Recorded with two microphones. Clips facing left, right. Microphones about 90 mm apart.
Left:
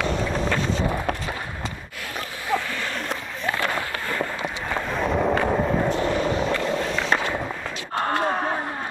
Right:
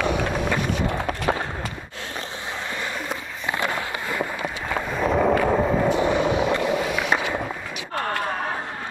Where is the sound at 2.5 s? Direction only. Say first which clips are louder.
Left 5 dB; 20° right (ahead or behind).